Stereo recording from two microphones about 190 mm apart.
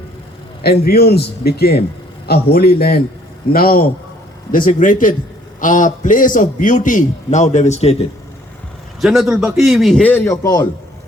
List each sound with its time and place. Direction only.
0.6 s a man's voice: 55° left (ahead or behind); by 7.9 s 35° left (ahead or behind)
9.0 s a man's voice: centre (ahead or behind); by 10.7 s 20° left (ahead or behind)